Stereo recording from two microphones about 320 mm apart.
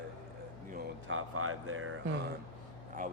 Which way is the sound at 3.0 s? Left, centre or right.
Right.